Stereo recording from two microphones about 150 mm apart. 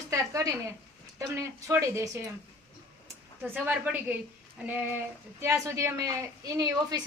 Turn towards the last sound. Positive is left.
turn(degrees=-25)  # may be behind; listen again after turning